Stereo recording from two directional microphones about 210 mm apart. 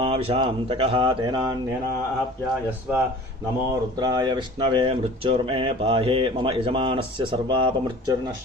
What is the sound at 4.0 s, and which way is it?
Speech, 20° right (ahead or behind).